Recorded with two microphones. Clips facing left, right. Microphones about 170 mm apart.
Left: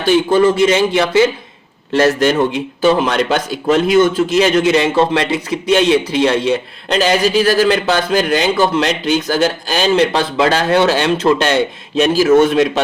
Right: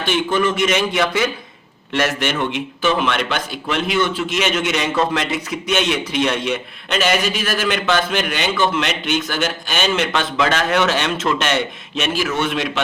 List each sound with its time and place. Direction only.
0.0 s speech: 35° left (ahead or behind)